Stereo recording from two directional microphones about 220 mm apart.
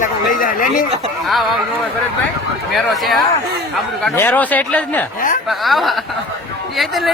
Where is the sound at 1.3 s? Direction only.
Centre (ahead or behind).